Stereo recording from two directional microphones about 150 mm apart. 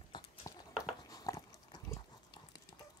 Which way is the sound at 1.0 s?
25° left (ahead or behind).